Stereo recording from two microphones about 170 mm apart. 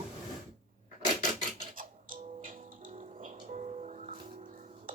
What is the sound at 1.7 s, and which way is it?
Music, 55° right (ahead or behind).